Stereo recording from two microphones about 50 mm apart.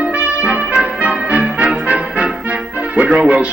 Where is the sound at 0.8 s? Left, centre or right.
Right.